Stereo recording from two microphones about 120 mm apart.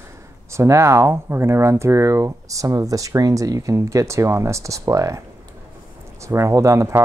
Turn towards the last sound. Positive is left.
turn(degrees=-25)  # may be behind; listen again after turning